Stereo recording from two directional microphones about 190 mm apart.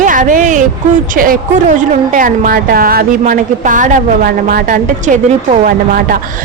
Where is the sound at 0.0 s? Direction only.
45° right (ahead or behind).